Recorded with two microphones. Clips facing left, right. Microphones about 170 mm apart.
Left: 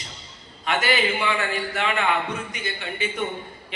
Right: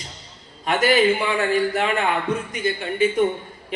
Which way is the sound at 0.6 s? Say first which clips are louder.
Right 6 dB; 45° right (ahead or behind).